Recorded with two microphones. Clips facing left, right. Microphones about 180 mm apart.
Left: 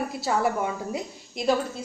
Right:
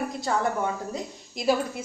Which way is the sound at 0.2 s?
5° left (ahead or behind).